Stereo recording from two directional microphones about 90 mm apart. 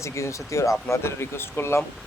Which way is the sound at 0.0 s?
35° left (ahead or behind).